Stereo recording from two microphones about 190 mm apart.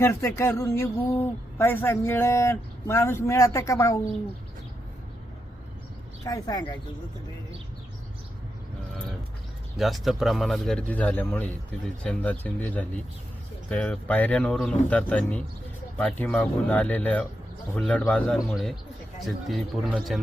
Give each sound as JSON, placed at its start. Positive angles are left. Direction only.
{"t": 0.0, "sound": "speech", "side_deg": 15}
{"t": 6.2, "sound": "speech", "side_deg": 20}
{"t": 9.7, "sound": "speech", "side_deg": 0}